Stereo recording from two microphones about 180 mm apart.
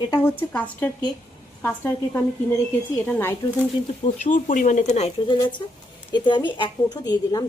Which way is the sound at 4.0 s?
45° left (ahead or behind).